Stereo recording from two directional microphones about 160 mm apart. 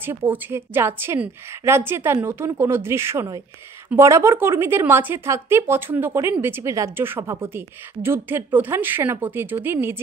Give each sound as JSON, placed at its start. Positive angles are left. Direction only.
{"t": 0.0, "sound": "a woman's voice", "side_deg": -15}